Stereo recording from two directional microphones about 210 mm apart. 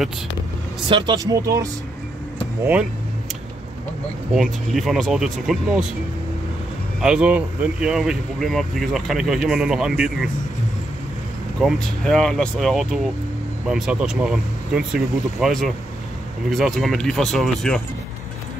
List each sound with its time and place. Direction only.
0.8 s speech: 20° right (ahead or behind)
4.3 s speech: centre (ahead or behind)
7.0 s speech: 5° right (ahead or behind)
11.6 s speech: centre (ahead or behind)